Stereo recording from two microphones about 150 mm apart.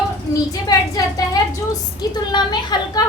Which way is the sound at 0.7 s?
25° left (ahead or behind).